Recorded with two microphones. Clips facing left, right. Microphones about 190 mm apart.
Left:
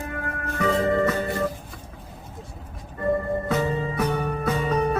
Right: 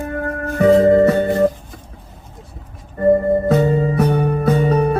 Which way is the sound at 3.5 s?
35° right (ahead or behind).